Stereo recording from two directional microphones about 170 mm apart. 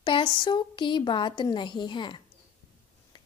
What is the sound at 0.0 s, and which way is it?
A woman's voice, 30° left (ahead or behind).